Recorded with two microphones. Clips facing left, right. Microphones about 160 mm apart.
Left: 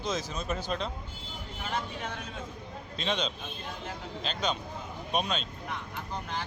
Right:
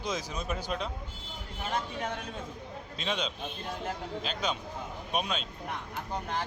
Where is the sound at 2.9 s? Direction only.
10° right (ahead or behind).